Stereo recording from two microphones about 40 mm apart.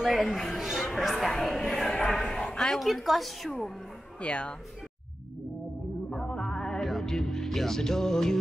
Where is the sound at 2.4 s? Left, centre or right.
Centre.